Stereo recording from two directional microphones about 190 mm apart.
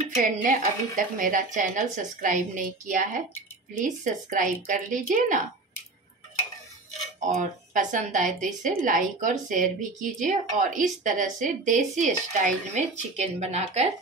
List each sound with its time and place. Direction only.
0.4 s a woman's voice: 45° right (ahead or behind)
7.2 s a woman's voice: 40° right (ahead or behind)